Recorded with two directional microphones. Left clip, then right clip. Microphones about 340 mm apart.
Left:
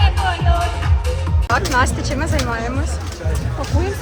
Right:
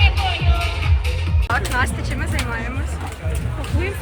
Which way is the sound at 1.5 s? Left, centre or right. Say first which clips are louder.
Left 4 dB; centre.